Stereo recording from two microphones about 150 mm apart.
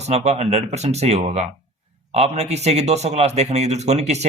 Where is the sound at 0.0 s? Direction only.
45° right (ahead or behind).